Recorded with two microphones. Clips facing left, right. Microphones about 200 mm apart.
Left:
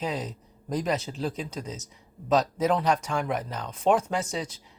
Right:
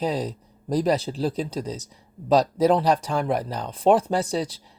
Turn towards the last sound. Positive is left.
turn(degrees=-35)  # may be behind; listen again after turning